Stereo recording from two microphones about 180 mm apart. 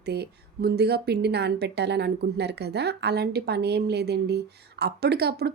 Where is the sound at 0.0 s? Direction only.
65° right (ahead or behind).